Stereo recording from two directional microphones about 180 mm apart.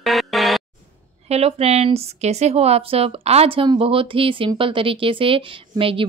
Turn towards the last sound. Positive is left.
turn(degrees=-30)  # may be behind; listen again after turning